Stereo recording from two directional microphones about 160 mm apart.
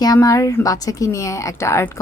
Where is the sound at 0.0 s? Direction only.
20° left (ahead or behind).